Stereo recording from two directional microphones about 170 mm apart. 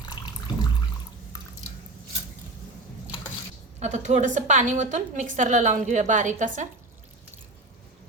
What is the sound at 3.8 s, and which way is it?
A woman's voice, 40° right (ahead or behind).